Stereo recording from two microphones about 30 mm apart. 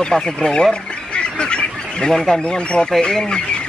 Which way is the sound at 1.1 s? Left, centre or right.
Left.